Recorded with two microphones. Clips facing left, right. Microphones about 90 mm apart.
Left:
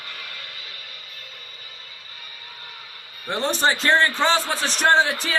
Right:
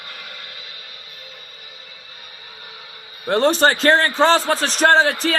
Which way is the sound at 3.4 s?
60° right (ahead or behind).